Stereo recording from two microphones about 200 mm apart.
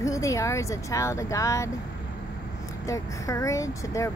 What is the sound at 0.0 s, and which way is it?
Speech, 15° left (ahead or behind).